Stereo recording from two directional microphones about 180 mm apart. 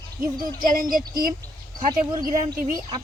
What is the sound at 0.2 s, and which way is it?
Speech, 50° right (ahead or behind).